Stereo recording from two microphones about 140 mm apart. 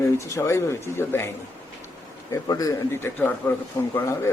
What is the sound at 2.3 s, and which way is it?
Speech, 25° left (ahead or behind).